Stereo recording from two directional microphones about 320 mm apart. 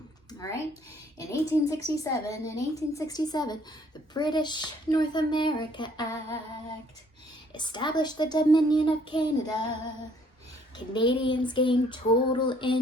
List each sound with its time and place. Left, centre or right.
0.3 s a sound: centre
1.3 s speech: centre
7.5 s speech: centre
10.8 s speech: centre